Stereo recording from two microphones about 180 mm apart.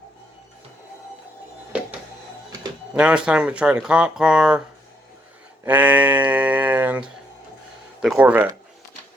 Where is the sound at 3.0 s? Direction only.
5° right (ahead or behind).